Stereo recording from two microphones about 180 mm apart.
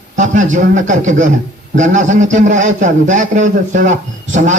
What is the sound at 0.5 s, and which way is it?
Speech, 45° right (ahead or behind).